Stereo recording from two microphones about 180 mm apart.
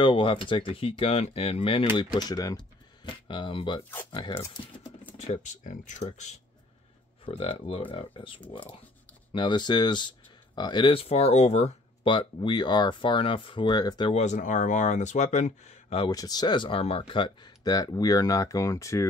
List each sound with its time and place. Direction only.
0.0 s speech: 30° left (ahead or behind)
5.1 s speech: 40° left (ahead or behind); by 14.1 s 25° left (ahead or behind)
14.1 s speech: 40° left (ahead or behind)
16.1 s speech: 20° left (ahead or behind)